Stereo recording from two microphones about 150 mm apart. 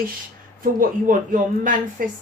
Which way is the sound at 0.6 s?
65° right (ahead or behind).